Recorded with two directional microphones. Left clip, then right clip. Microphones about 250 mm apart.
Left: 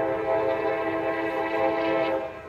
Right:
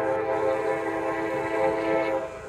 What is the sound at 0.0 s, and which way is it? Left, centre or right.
Train, right.